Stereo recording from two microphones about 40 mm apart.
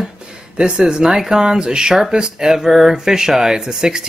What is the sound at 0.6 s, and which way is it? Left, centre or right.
Speech, right.